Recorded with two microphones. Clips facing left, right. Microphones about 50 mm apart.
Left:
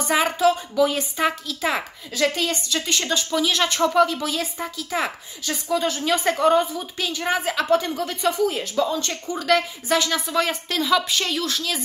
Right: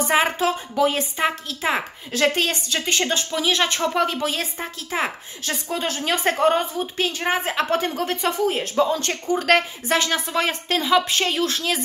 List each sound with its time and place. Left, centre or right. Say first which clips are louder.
0.1 s a sound: left 2 dB; right
1.6 s speech: right 1 dB; right
2.1 s a woman's voice: right 2 dB; right